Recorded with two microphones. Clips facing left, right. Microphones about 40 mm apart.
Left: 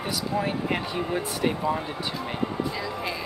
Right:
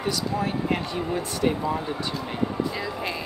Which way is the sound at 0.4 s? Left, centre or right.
Centre.